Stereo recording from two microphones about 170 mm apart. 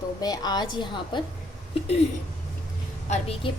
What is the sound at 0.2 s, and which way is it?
A woman's voice, 25° left (ahead or behind).